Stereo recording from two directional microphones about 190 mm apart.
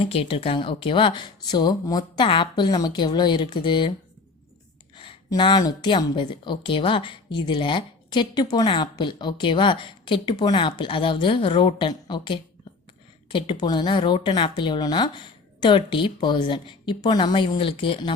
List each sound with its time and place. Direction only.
0.0 s a woman's voice: 30° left (ahead or behind)
4.9 s a woman's voice: 25° left (ahead or behind)